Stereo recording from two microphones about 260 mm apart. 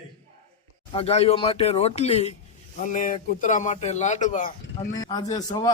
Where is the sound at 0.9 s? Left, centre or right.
Left.